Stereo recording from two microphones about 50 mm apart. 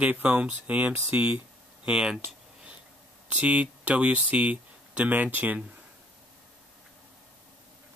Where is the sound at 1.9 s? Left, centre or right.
Centre.